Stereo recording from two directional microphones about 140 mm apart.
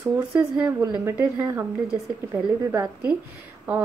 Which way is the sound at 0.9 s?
15° right (ahead or behind).